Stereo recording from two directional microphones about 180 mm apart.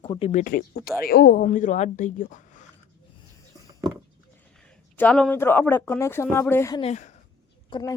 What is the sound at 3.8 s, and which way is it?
Goat, 25° right (ahead or behind).